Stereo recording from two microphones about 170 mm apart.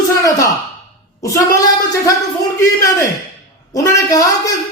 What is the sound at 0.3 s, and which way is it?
Speech, 20° left (ahead or behind).